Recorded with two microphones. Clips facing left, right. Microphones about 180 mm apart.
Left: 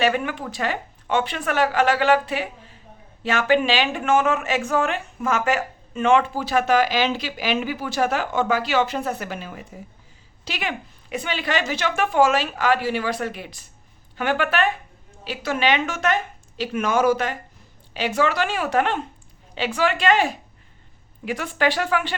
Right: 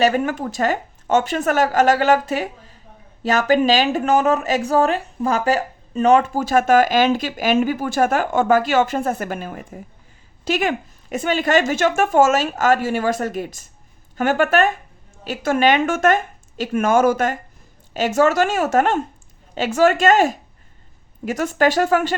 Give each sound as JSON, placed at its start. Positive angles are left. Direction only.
{"t": 0.0, "sound": "speech", "side_deg": -40}